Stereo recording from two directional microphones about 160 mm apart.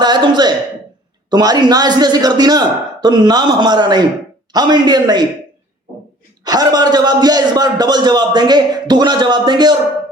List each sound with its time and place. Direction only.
0.0 s a sound: 25° right (ahead or behind)
1.3 s a man's voice: 25° right (ahead or behind)
6.4 s a man's voice: 25° right (ahead or behind)